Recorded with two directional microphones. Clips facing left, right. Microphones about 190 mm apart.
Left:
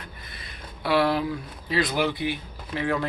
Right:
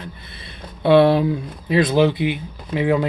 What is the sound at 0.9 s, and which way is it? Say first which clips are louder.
Speech: right 9 dB; 25° right (ahead or behind).